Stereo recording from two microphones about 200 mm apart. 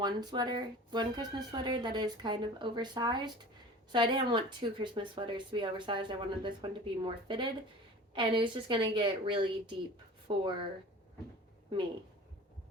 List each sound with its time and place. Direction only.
0.0 s speech: 20° right (ahead or behind)